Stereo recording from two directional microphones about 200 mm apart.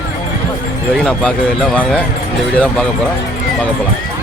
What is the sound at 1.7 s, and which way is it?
Speech, 5° left (ahead or behind).